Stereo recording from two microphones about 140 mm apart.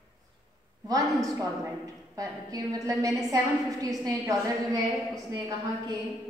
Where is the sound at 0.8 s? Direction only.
25° right (ahead or behind).